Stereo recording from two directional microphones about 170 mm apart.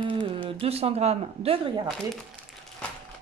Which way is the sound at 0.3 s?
30° right (ahead or behind).